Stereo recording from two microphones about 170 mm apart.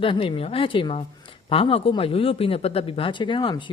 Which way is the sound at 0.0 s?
30° left (ahead or behind).